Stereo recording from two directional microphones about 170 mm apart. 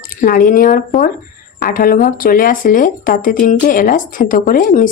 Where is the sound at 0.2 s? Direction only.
55° left (ahead or behind).